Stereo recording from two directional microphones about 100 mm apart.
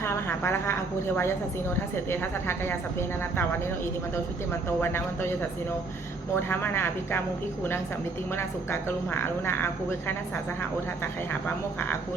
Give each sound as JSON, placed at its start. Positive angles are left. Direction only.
{"t": 0.0, "sound": "a woman's voice", "side_deg": 25}
{"t": 4.8, "sound": "a woman's voice", "side_deg": 25}
{"t": 8.4, "sound": "a woman's voice", "side_deg": 25}